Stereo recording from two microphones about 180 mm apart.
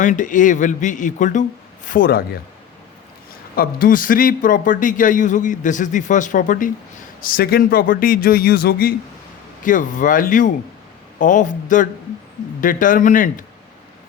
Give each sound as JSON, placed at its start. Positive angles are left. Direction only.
{"t": 0.0, "sound": "a man's voice", "side_deg": 45}
{"t": 1.9, "sound": "speech", "side_deg": 55}
{"t": 3.5, "sound": "a man's voice", "side_deg": 55}